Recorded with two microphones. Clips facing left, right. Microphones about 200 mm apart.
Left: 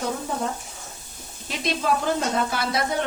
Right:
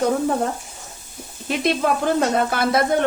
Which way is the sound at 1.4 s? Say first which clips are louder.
Right 5 dB; 55° right (ahead or behind).